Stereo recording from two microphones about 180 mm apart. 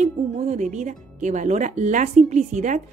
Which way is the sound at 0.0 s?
40° right (ahead or behind).